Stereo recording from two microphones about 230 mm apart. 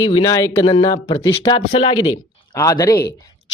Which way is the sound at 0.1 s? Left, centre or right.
Centre.